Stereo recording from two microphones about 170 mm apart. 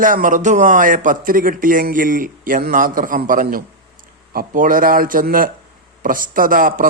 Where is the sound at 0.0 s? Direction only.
50° right (ahead or behind).